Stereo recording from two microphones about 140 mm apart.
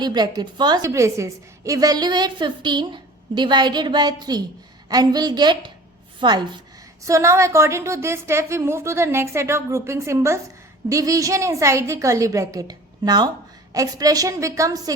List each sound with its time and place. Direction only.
0.0 s a woman's voice: 30° right (ahead or behind)
7.0 s a woman's voice: 20° right (ahead or behind)